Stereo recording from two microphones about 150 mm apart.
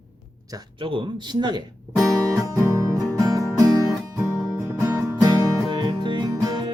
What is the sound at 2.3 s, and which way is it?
Music, 20° right (ahead or behind).